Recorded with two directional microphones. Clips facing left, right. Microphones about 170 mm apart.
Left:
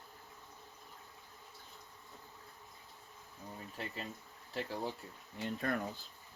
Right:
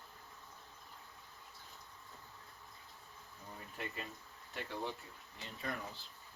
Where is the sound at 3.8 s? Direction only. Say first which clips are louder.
Left 1 dB; 30° left (ahead or behind).